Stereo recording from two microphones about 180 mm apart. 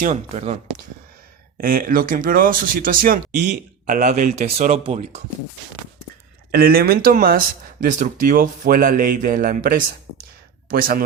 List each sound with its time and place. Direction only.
0.0 s speech: 40° right (ahead or behind)
1.6 s speech: 50° right (ahead or behind)
6.5 s speech: 55° right (ahead or behind)
10.7 s speech: 55° right (ahead or behind)